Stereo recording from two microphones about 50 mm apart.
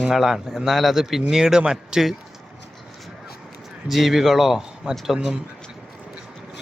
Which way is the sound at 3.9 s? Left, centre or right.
Centre.